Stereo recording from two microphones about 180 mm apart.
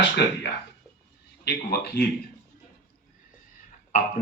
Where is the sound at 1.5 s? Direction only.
70° left (ahead or behind).